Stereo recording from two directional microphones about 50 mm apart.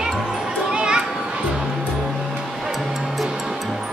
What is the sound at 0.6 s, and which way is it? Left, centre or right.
Children playing, centre.